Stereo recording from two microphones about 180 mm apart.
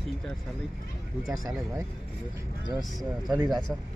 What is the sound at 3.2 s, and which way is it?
Speech, 20° right (ahead or behind).